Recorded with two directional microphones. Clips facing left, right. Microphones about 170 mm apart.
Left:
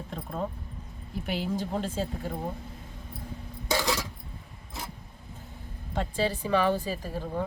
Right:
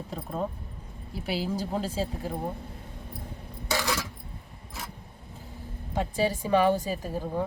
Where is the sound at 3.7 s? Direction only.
15° left (ahead or behind).